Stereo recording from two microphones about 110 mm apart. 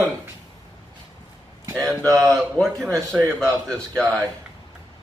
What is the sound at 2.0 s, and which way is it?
Speech, 30° right (ahead or behind).